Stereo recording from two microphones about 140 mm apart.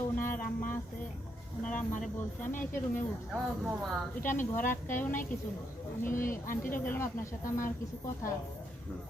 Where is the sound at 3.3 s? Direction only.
5° right (ahead or behind).